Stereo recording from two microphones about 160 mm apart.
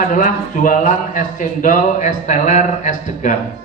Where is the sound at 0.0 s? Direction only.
55° left (ahead or behind).